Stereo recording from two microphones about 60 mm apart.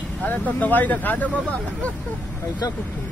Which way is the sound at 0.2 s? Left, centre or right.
Left.